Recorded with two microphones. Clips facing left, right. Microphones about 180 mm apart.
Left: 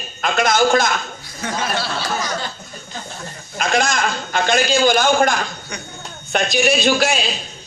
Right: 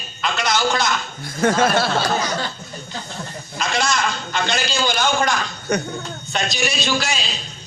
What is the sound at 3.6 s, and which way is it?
A man's voice, 50° left (ahead or behind).